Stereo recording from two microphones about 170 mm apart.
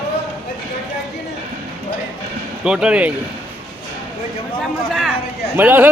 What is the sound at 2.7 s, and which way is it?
Speech, 5° right (ahead or behind).